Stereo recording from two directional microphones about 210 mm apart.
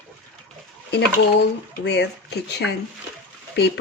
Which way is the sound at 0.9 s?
55° left (ahead or behind).